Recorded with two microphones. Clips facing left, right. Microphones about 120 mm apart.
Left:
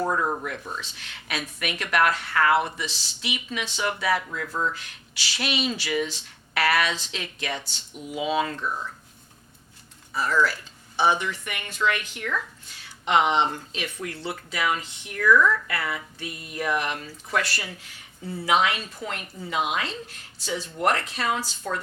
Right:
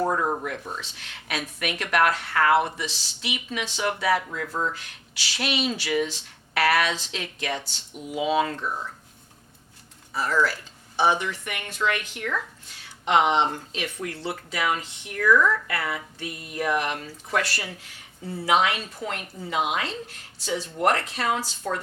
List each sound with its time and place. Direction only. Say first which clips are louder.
0.0 s speech: right 1 dB; 30° right (ahead or behind)
0.8 s a woman's voice: even; 50° right (ahead or behind)
4.2 s speech: even; 35° right (ahead or behind)
5.4 s a woman's voice: right 1 dB; 55° right (ahead or behind); by 8.9 s 30° right (ahead or behind)
10.1 s a woman's voice: even; 35° right (ahead or behind)
15.3 s a woman's voice: left 1 dB; 35° right (ahead or behind)
21.7 s speech: right 1 dB; 35° right (ahead or behind)